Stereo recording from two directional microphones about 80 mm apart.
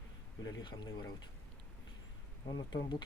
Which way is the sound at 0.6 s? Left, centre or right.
Left.